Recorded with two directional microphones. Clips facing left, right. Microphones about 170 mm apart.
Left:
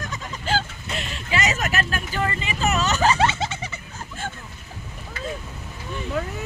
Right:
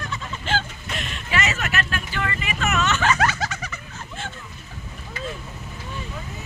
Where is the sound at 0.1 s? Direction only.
35° left (ahead or behind).